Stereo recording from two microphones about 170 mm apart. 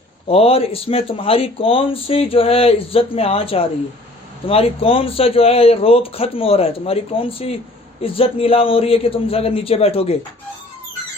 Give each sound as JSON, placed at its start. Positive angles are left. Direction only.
{"t": 0.3, "sound": "speech", "side_deg": 35}